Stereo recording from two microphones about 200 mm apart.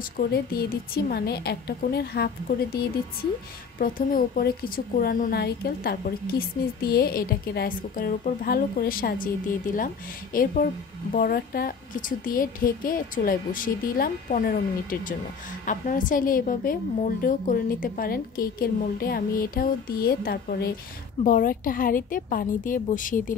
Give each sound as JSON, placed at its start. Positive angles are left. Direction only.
{"t": 0.3, "sound": "a woman's voice", "side_deg": 50}